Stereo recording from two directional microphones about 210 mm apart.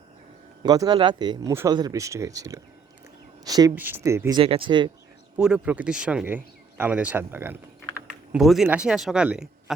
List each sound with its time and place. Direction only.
0.6 s speech: 20° right (ahead or behind)
4.4 s speech: 25° right (ahead or behind)
5.4 s speech: 5° right (ahead or behind)